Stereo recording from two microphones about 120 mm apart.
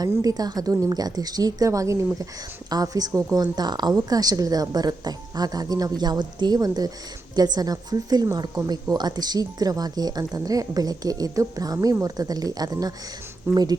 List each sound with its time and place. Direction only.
0.0 s a woman's voice: 30° right (ahead or behind)